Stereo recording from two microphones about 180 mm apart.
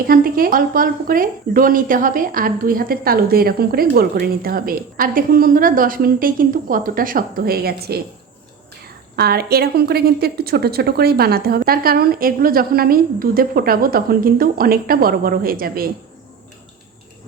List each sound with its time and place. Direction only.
0.0 s speech: 55° right (ahead or behind)
9.1 s a woman's voice: 60° right (ahead or behind)